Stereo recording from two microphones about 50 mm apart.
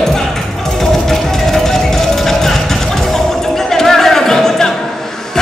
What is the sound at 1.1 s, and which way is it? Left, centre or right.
Music, centre.